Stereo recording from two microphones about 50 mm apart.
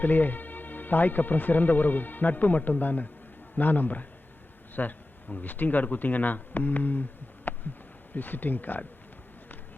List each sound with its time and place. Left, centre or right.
0.0 s speech: left
7.5 s a sound: left
8.1 s speech: left